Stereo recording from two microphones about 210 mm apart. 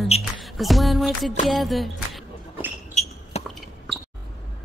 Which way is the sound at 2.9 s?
35° left (ahead or behind).